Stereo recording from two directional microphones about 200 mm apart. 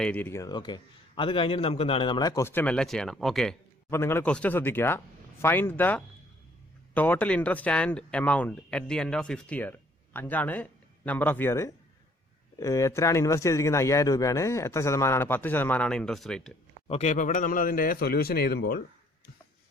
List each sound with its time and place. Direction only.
0.0 s a man's voice: 10° left (ahead or behind)
16.9 s speech: 35° left (ahead or behind); by 18.8 s 50° left (ahead or behind)